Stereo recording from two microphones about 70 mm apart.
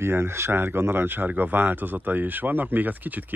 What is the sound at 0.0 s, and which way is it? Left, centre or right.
Speech, right.